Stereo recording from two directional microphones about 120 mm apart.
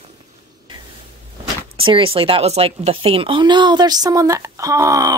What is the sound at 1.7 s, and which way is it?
A woman's voice, 45° right (ahead or behind).